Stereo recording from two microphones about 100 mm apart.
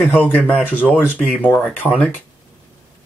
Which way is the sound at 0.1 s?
15° left (ahead or behind).